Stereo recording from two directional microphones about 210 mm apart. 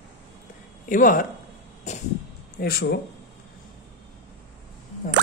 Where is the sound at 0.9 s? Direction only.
40° left (ahead or behind).